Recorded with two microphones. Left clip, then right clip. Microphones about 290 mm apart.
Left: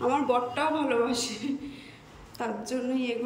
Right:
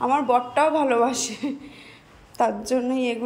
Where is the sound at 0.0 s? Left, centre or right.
Centre.